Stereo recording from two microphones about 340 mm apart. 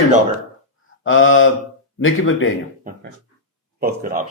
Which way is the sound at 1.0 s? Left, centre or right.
Left.